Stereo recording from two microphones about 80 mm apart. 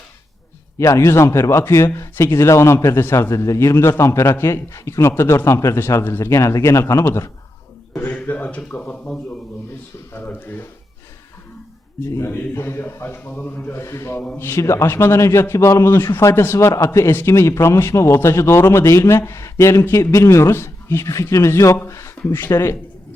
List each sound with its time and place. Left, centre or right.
0.8 s a man's voice: left
12.0 s speech: left